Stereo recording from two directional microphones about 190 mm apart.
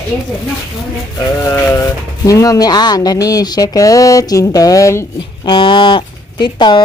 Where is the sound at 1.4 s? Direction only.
15° left (ahead or behind).